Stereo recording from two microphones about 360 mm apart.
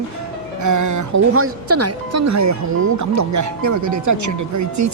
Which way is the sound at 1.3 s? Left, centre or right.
Right.